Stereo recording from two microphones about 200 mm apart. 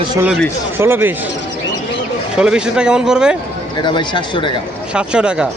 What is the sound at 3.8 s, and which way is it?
Speech, 25° left (ahead or behind).